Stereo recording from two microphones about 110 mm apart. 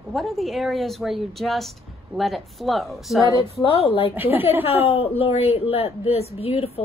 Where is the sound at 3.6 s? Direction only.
60° left (ahead or behind).